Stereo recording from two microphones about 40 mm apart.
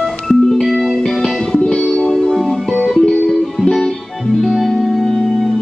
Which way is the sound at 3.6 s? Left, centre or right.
Centre.